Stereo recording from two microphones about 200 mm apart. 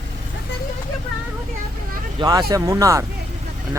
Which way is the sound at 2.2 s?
20° right (ahead or behind).